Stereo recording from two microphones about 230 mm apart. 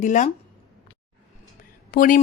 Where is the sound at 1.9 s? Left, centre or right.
Left.